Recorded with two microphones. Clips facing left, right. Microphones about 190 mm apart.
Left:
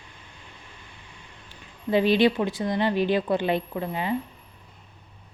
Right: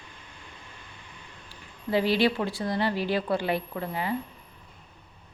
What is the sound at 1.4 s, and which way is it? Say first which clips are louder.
A woman's voice: left 4 dB; 20° left (ahead or behind).